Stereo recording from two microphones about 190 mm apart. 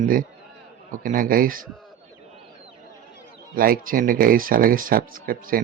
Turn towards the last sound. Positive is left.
turn(degrees=-50)  # may be behind; listen again after turning